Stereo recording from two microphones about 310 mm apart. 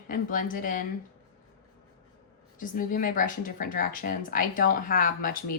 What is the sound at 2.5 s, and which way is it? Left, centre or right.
Speech, left.